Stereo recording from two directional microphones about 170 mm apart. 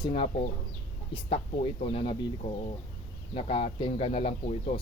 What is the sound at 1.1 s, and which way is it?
Speech, 35° left (ahead or behind).